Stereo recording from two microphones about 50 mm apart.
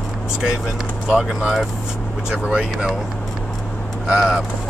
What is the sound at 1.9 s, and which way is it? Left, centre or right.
Vehicle, centre.